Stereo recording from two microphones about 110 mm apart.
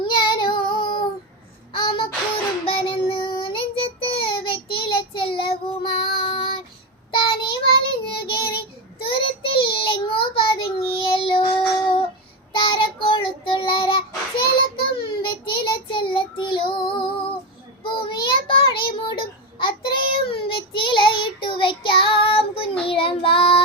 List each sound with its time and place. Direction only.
0.0 s child singing: 50° left (ahead or behind)
9.0 s child singing: 50° left (ahead or behind)
12.5 s child singing: 50° left (ahead or behind)